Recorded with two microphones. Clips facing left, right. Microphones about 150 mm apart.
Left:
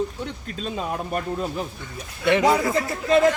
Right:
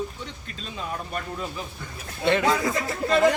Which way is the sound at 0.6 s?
45° left (ahead or behind).